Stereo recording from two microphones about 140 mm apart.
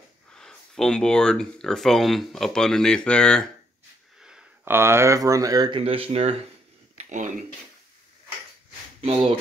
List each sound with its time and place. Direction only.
0.3 s speech: 5° left (ahead or behind)
4.2 s a sound: 5° right (ahead or behind)
4.6 s speech: 20° right (ahead or behind)
5.8 s speech: 45° right (ahead or behind)
7.0 s speech: 60° right (ahead or behind)
9.0 s speech: 45° right (ahead or behind)